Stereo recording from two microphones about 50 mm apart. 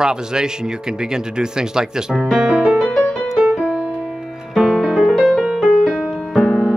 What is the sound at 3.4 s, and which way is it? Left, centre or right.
Music, right.